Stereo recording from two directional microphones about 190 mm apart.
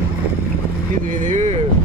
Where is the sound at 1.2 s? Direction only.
40° right (ahead or behind).